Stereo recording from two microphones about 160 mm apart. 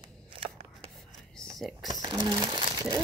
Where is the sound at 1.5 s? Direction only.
Centre (ahead or behind).